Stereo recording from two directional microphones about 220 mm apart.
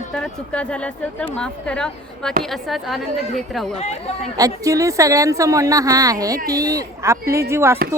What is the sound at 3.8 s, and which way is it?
Speech, 30° left (ahead or behind).